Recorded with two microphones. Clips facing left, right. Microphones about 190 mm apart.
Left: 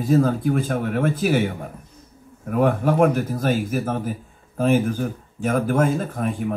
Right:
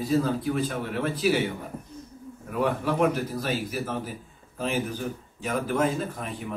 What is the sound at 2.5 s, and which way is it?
Speech, 50° left (ahead or behind).